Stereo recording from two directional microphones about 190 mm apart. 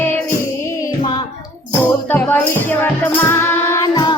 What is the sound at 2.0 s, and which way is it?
Music, 10° left (ahead or behind).